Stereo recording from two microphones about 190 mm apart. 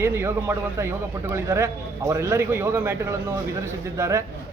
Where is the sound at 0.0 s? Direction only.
15° right (ahead or behind).